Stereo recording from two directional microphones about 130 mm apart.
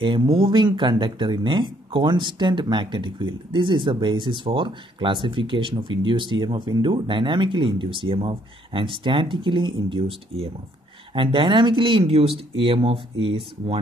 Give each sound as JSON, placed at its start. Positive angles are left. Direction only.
{"t": 0.0, "sound": "speech", "side_deg": -40}